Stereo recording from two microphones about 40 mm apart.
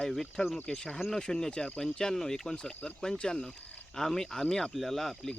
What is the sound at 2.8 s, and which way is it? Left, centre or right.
Speech, left.